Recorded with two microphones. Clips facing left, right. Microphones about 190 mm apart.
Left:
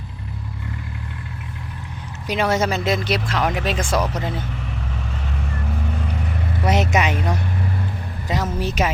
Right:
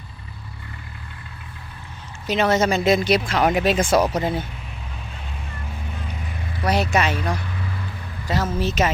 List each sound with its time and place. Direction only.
2.2 s speech: 10° left (ahead or behind); by 4.4 s 10° right (ahead or behind)
6.7 s speech: 20° left (ahead or behind)